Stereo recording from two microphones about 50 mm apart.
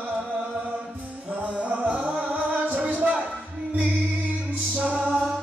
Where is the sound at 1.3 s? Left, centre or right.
Right.